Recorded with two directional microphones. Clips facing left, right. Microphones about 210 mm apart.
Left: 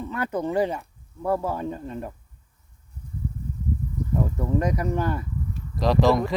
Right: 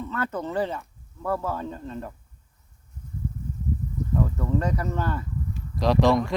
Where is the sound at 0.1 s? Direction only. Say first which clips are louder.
Left 5 dB; 15° left (ahead or behind).